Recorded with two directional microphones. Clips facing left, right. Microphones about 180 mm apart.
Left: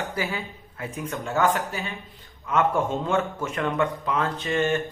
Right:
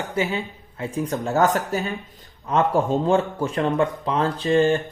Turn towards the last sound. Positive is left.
turn(degrees=-35)  # may be behind; listen again after turning